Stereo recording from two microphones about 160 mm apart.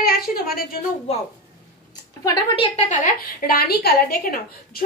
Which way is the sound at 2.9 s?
55° left (ahead or behind).